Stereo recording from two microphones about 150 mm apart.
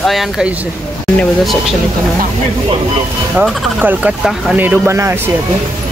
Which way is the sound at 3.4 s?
10° right (ahead or behind).